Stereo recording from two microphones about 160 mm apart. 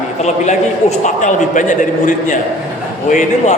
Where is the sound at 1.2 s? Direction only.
55° left (ahead or behind).